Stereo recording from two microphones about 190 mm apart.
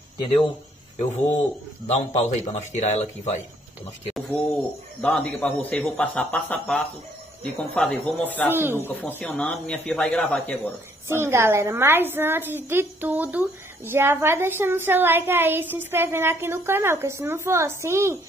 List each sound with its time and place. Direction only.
0.9 s speech: 35° left (ahead or behind)
5.0 s speech: 10° left (ahead or behind)
8.5 s a woman's voice: 10° right (ahead or behind)
8.7 s speech: 10° left (ahead or behind)
11.1 s a woman's voice: 15° right (ahead or behind)